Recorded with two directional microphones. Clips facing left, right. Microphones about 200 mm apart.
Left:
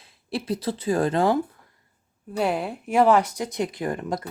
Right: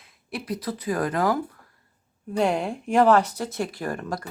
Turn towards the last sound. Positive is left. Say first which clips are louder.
# left 2 dB
turn(degrees=20)  # may be behind; listen again after turning